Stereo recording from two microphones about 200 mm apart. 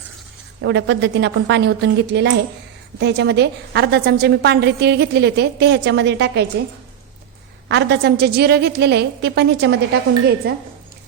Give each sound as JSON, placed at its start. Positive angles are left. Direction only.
{"t": 0.6, "sound": "a woman's voice", "side_deg": -60}
{"t": 7.7, "sound": "a woman's voice", "side_deg": -60}